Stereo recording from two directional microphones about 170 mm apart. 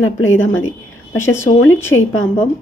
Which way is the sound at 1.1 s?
15° left (ahead or behind).